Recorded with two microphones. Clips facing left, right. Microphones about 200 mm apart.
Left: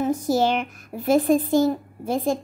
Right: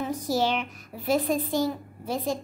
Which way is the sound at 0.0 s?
50° left (ahead or behind).